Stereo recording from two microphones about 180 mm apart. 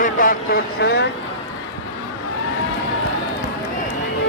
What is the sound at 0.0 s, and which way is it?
Speech, 50° left (ahead or behind).